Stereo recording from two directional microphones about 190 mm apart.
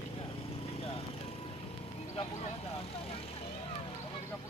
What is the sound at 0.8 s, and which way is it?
Lawn mower, 30° left (ahead or behind).